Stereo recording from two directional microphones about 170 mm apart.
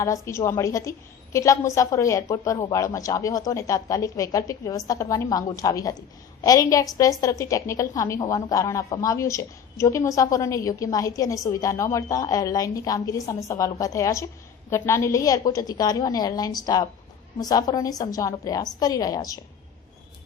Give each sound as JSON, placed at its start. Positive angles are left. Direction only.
{"t": 0.0, "sound": "a woman's voice", "side_deg": 15}